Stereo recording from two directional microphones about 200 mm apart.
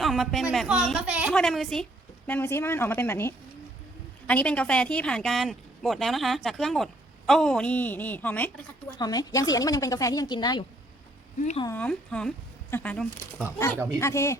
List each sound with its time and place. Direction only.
0.0 s a woman's voice: centre (ahead or behind)
9.0 s a woman's voice: 20° left (ahead or behind)
11.6 s a woman's voice: 10° left (ahead or behind)